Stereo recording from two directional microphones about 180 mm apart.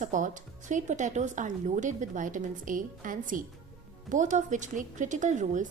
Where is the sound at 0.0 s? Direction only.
45° right (ahead or behind).